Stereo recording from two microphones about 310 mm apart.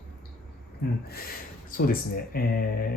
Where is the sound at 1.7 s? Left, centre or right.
Left.